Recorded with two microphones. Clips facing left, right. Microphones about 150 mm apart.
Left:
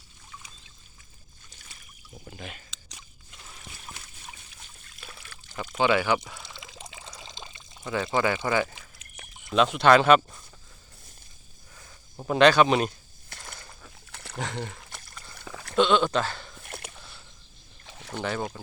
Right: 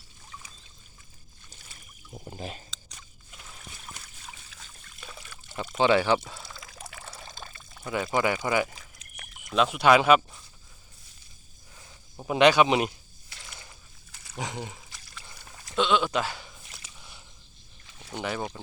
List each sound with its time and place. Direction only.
2.1 s speech: 35° right (ahead or behind)
5.7 s speech: 30° right (ahead or behind)
6.4 s pour: 25° left (ahead or behind)
8.1 s speech: 20° right (ahead or behind)
9.5 s speech: 5° right (ahead or behind)
12.3 s speech: 15° right (ahead or behind)
13.3 s a sound: 50° left (ahead or behind)
13.8 s dog: 65° left (ahead or behind)
14.3 s speech: 10° right (ahead or behind)
14.8 s a sound: 55° left (ahead or behind)
15.7 s speech: centre (ahead or behind)
16.6 s biting: 60° left (ahead or behind)
17.8 s a sound: 85° left
18.2 s speech: 10° right (ahead or behind)